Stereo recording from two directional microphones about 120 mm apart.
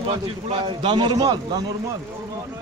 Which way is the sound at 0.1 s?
50° right (ahead or behind).